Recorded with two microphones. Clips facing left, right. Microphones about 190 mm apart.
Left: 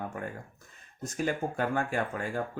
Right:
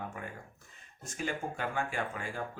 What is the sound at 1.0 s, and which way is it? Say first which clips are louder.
Mantra: left 6 dB; 40° left (ahead or behind).